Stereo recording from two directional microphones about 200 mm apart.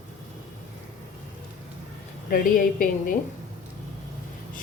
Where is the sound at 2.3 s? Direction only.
45° left (ahead or behind).